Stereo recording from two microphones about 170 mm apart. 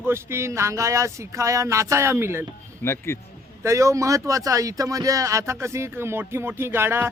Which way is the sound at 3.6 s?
15° right (ahead or behind).